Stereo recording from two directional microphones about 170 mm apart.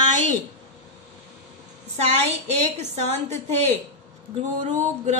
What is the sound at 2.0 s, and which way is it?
A woman's voice, 40° right (ahead or behind).